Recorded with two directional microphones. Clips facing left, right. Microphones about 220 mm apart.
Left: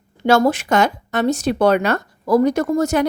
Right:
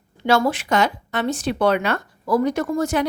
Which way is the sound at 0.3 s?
45° left (ahead or behind).